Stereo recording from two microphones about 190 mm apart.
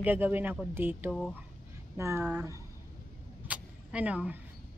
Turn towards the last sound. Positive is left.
turn(degrees=-5)  # may be behind; listen again after turning